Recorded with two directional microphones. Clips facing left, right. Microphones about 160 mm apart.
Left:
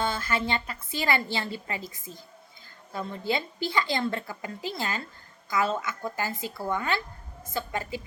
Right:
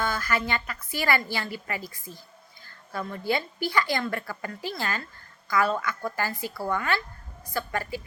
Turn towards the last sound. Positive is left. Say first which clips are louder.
# right 1 dB
turn(degrees=20)  # may be behind; listen again after turning